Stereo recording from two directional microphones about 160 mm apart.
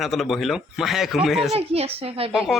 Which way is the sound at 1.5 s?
40° right (ahead or behind).